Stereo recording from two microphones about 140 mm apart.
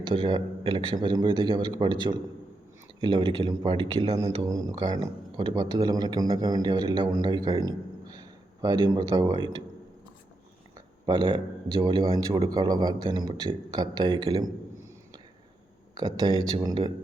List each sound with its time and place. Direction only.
0.0 s a man's voice: 35° right (ahead or behind)
10.8 s a man's voice: 35° right (ahead or behind)
16.0 s speech: 30° right (ahead or behind)